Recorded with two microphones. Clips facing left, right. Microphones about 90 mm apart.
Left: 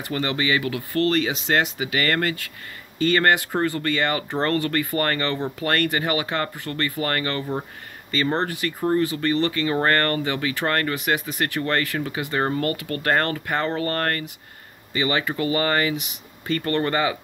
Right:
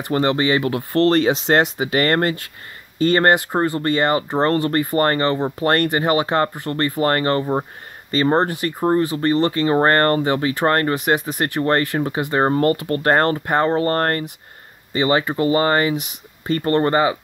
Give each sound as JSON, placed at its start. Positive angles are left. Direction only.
{"t": 0.0, "sound": "speech", "side_deg": -35}